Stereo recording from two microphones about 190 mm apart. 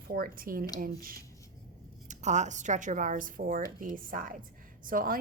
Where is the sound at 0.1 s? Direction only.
50° right (ahead or behind).